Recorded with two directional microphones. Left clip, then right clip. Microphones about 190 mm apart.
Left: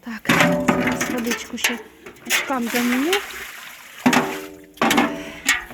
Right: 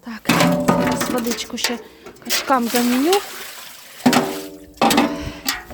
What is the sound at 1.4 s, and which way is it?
Speech, 10° right (ahead or behind).